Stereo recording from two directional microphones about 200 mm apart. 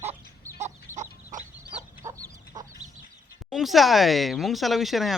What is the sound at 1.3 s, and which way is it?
Chicken, 40° right (ahead or behind).